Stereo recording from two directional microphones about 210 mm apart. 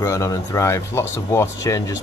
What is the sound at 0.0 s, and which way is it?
Speech, 15° left (ahead or behind).